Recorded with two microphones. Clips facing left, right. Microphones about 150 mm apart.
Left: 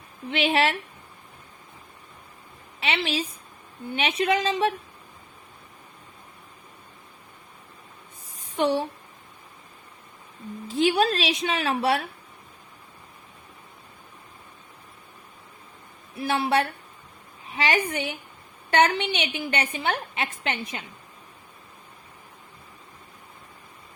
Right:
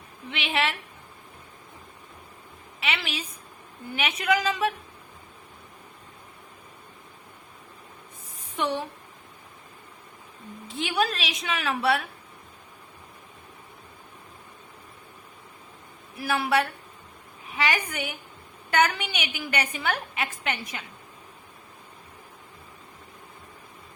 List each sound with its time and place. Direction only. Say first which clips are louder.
0.3 s a woman's voice: left 5 dB; 35° left (ahead or behind)
2.8 s a woman's voice: left 5 dB; 30° left (ahead or behind)
8.4 s a sound: left 5 dB; 30° left (ahead or behind)
10.7 s a woman's voice: left 6 dB; 35° left (ahead or behind)
16.1 s a woman's voice: left 1 dB; 25° left (ahead or behind)